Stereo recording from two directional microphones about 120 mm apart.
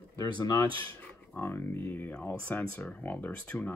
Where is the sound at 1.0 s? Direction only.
15° left (ahead or behind).